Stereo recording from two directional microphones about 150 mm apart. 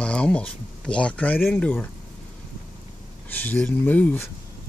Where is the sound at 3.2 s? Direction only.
10° left (ahead or behind).